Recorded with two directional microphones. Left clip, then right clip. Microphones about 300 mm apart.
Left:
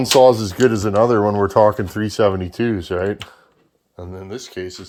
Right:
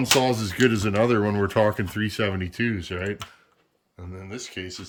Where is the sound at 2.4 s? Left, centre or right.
Centre.